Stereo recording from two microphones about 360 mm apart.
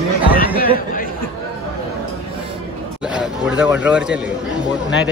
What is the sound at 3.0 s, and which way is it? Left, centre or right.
A man's voice, centre.